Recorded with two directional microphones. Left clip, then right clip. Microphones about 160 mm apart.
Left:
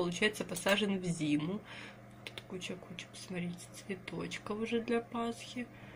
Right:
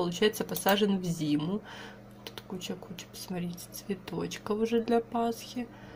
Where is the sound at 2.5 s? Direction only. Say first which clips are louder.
Right 4 dB; 25° right (ahead or behind).